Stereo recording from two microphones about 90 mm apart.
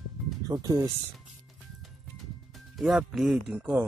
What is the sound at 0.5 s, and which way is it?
Speech, 40° right (ahead or behind).